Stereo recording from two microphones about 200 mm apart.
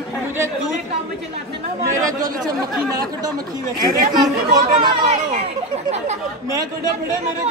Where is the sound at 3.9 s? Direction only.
40° right (ahead or behind).